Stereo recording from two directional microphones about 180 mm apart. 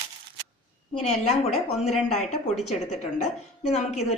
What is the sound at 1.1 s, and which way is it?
A woman's voice, 35° left (ahead or behind).